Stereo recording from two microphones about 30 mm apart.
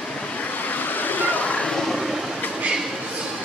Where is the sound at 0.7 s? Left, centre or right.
Left.